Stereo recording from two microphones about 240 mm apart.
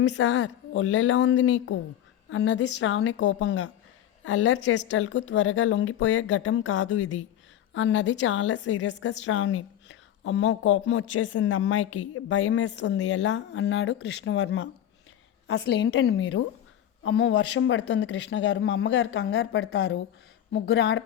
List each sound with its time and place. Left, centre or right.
0.0 s a woman's voice: left
10.2 s a woman's voice: left